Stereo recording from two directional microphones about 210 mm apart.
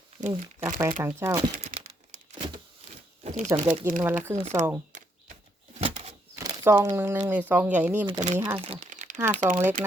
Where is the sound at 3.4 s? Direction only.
15° right (ahead or behind).